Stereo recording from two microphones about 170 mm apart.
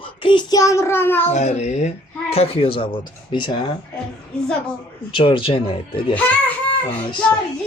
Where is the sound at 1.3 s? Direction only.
40° left (ahead or behind).